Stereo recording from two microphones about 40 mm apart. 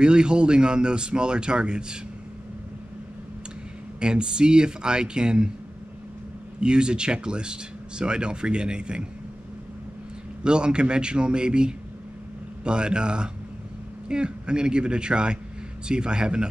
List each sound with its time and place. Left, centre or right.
0.0 s a man's voice: right
4.0 s a man's voice: right
6.6 s a man's voice: right
10.4 s a man's voice: right